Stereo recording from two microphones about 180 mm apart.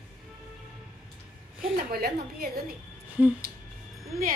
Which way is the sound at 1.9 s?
55° right (ahead or behind).